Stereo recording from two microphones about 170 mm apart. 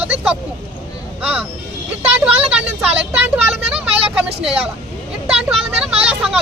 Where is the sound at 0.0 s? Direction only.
5° right (ahead or behind).